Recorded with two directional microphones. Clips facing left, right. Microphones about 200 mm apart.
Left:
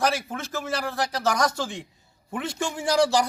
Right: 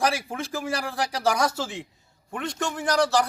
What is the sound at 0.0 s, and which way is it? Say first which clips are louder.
A man's voice: even; 10° right (ahead or behind).